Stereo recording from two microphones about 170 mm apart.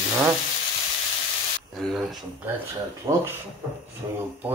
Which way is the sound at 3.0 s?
15° right (ahead or behind).